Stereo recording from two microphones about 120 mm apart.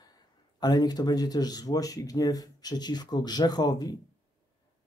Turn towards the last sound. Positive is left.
turn(degrees=35)  # may be behind; listen again after turning